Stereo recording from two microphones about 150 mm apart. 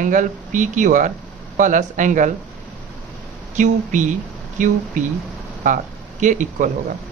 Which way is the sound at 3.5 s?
55° right (ahead or behind).